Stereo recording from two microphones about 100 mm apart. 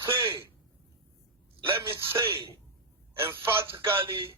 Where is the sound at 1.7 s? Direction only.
25° right (ahead or behind).